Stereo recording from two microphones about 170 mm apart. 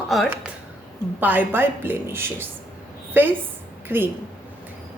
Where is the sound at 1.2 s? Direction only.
10° right (ahead or behind).